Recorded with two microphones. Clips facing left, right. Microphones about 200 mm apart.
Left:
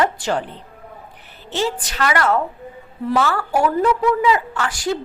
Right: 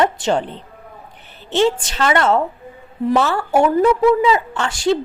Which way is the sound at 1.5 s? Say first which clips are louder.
Right 6 dB; 25° right (ahead or behind).